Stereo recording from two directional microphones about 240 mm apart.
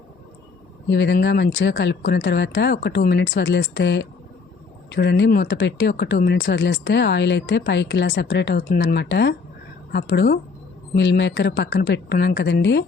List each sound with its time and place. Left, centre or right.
0.9 s speech: left